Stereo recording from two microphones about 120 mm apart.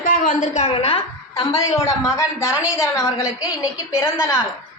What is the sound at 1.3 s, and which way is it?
A woman's voice, 30° left (ahead or behind).